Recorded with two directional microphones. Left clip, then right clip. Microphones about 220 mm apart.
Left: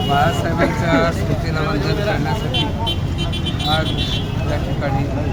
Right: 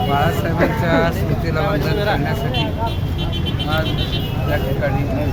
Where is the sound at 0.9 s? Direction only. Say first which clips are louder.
Left 1 dB; 5° right (ahead or behind).